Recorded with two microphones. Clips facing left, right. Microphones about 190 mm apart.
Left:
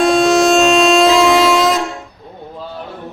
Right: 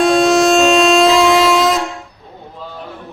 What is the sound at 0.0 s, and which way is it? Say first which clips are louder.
Train: even; centre (ahead or behind).